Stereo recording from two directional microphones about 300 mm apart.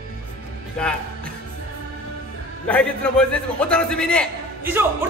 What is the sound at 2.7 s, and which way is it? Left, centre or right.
A man's voice, centre.